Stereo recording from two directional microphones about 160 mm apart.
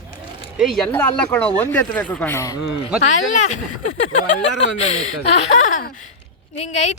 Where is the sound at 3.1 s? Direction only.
50° left (ahead or behind).